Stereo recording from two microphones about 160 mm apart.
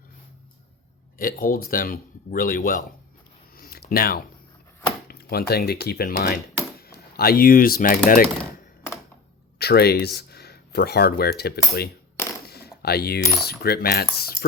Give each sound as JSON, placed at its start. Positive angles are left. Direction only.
{"t": 1.2, "sound": "speech", "side_deg": 65}
{"t": 3.6, "sound": "a sound", "side_deg": 70}
{"t": 5.0, "sound": "speech", "side_deg": 75}
{"t": 9.6, "sound": "speech", "side_deg": 75}
{"t": 12.5, "sound": "coin", "side_deg": 75}